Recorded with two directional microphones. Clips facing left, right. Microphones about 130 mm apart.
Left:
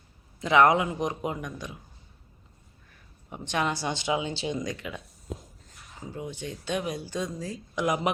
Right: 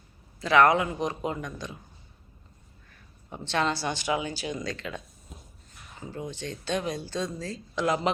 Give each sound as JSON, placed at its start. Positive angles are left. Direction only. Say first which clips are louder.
{"t": 0.3, "sound": "speech", "louder": "even", "side_deg": 20}
{"t": 3.2, "sound": "speech", "louder": "right 1 dB", "side_deg": 15}
{"t": 5.3, "sound": "a sound", "louder": "left 12 dB", "side_deg": 90}
{"t": 6.0, "sound": "speech", "louder": "even", "side_deg": 10}